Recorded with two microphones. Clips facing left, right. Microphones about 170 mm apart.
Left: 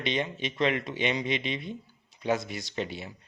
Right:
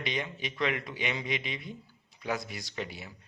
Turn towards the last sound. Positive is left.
turn(degrees=25)  # may be behind; listen again after turning